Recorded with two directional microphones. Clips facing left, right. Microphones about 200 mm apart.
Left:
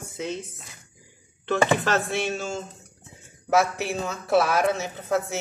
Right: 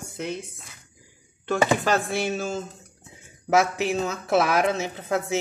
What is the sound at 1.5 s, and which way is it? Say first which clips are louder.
Speech: even; 10° right (ahead or behind).